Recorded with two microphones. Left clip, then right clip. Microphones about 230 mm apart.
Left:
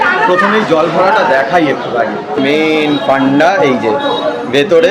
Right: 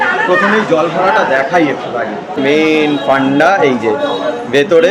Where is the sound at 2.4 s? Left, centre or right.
Centre.